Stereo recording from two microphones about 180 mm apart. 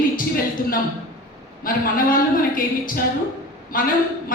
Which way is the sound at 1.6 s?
50° left (ahead or behind).